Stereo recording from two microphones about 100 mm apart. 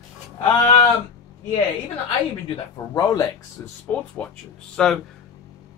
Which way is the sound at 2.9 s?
45° left (ahead or behind).